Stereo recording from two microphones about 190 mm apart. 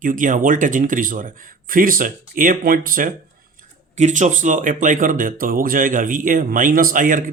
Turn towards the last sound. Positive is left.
turn(degrees=-45)  # may be behind; listen again after turning